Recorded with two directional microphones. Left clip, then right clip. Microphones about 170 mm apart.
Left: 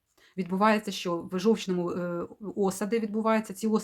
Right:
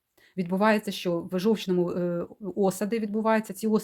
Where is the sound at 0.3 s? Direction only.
30° right (ahead or behind).